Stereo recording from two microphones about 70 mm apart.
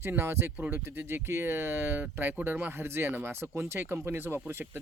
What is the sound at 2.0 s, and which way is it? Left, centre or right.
Speech, right.